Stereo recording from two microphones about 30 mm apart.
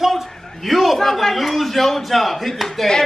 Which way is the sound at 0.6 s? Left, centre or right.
Centre.